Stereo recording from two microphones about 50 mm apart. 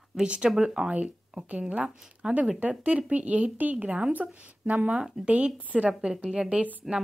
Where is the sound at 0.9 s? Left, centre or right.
Right.